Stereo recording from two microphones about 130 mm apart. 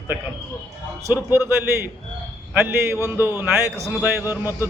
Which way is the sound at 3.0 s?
15° right (ahead or behind).